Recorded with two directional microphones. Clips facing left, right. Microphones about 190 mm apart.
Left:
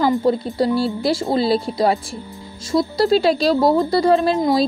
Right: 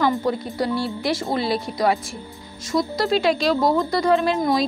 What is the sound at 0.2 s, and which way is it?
Speech, 30° left (ahead or behind).